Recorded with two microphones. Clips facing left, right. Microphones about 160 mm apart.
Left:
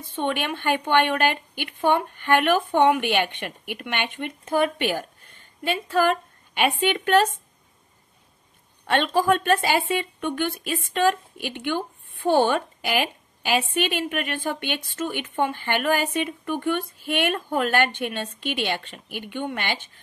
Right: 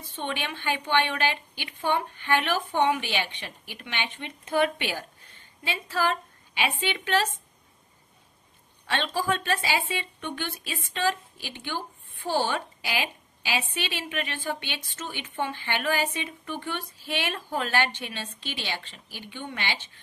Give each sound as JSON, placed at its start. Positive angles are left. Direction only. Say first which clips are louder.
{"t": 0.1, "sound": "a woman's voice", "louder": "left 7 dB", "side_deg": 50}
{"t": 8.8, "sound": "a woman's voice", "louder": "left 7 dB", "side_deg": 50}